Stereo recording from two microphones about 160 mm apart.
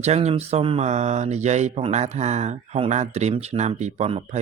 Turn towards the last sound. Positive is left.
turn(degrees=-40)  # may be behind; listen again after turning